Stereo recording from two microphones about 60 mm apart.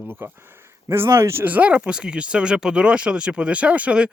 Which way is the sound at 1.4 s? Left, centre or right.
Right.